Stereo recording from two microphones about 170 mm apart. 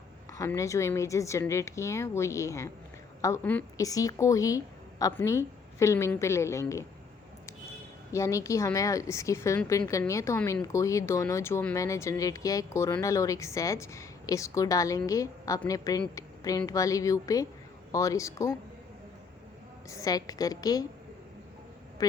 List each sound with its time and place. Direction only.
0.3 s a woman's voice: 20° left (ahead or behind)
8.1 s a woman's voice: 15° left (ahead or behind)
19.9 s speech: 20° left (ahead or behind)